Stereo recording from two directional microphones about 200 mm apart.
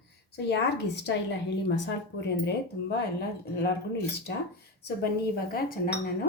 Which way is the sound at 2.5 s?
55° left (ahead or behind).